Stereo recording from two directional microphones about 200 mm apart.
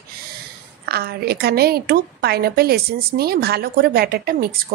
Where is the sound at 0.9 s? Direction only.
50° right (ahead or behind).